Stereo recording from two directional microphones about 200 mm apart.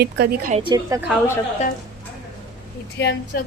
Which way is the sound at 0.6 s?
20° right (ahead or behind).